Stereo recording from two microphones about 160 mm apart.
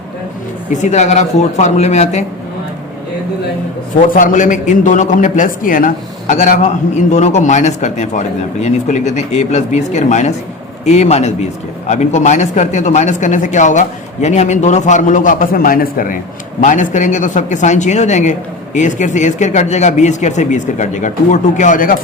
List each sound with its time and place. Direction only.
0.7 s speech: 50° left (ahead or behind)
4.1 s speech: 55° left (ahead or behind)
7.1 s speech: 45° left (ahead or behind); by 16.1 s 65° left (ahead or behind)
16.6 s speech: 50° left (ahead or behind)